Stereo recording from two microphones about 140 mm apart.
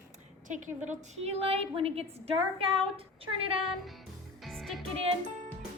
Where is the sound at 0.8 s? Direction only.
55° right (ahead or behind).